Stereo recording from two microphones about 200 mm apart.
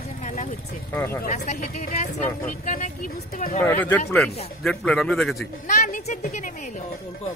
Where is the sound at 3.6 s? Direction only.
10° left (ahead or behind).